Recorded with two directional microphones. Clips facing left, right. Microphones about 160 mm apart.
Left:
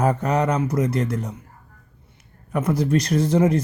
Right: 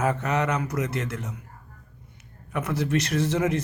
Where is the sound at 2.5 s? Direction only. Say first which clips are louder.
Left 5 dB; 35° left (ahead or behind).